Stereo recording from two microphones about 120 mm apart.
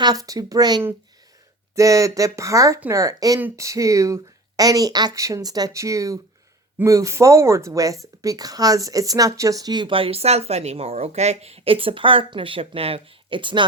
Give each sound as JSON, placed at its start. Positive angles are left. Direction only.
{"t": 0.0, "sound": "speech", "side_deg": -30}